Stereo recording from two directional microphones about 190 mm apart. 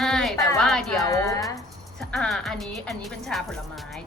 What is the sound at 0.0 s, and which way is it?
Music, centre (ahead or behind).